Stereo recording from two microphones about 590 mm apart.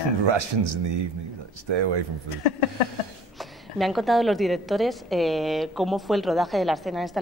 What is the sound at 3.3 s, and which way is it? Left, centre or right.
A woman's voice, centre.